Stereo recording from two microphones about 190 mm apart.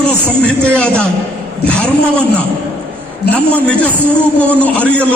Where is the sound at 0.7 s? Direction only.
5° left (ahead or behind).